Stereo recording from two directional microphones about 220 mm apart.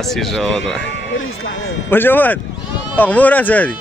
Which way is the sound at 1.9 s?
10° left (ahead or behind).